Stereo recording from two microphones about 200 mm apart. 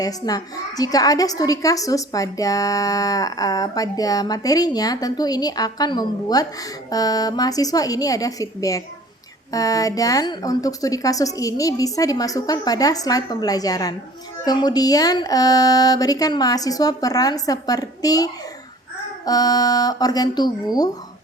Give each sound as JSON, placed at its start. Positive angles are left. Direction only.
{"t": 0.0, "sound": "a woman's voice", "side_deg": 20}